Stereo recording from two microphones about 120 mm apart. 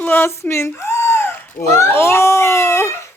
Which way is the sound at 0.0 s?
20° left (ahead or behind).